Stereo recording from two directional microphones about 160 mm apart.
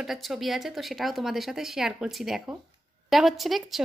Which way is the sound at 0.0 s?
Centre (ahead or behind).